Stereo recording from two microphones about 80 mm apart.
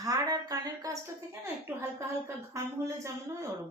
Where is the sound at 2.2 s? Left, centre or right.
Right.